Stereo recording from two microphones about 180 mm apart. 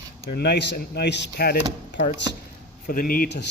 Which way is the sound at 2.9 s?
55° left (ahead or behind).